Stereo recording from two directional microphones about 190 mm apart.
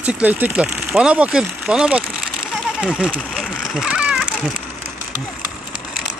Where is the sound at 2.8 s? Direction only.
5° right (ahead or behind).